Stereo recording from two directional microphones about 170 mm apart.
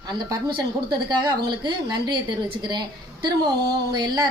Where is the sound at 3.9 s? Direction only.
25° right (ahead or behind).